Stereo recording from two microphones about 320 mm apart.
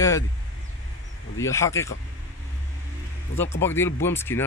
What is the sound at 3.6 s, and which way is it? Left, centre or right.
Speech, centre.